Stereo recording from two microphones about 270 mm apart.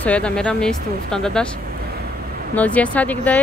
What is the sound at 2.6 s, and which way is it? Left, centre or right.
Speech, centre.